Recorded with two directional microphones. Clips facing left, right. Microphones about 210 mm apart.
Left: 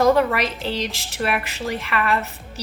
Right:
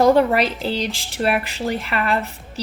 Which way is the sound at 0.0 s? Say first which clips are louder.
Right 3 dB; 30° right (ahead or behind).